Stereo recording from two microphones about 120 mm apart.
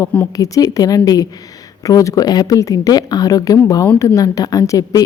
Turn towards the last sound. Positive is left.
turn(degrees=30)  # may be behind; listen again after turning